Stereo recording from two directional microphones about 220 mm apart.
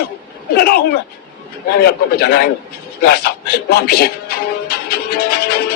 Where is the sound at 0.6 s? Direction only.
45° left (ahead or behind).